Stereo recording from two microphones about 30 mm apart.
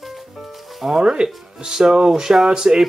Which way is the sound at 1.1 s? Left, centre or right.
Right.